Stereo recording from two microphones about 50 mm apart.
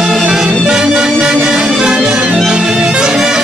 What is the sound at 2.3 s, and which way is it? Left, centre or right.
Music, centre.